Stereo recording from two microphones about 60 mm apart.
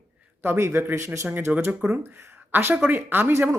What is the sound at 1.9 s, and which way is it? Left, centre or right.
Speech, right.